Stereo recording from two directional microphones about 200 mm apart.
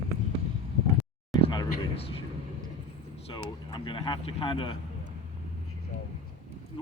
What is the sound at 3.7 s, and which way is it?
Speech, 25° left (ahead or behind).